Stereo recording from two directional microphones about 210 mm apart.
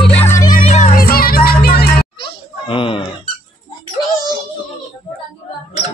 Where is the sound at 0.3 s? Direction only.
35° left (ahead or behind).